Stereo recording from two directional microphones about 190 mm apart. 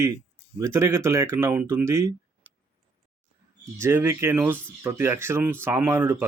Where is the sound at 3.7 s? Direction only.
10° right (ahead or behind).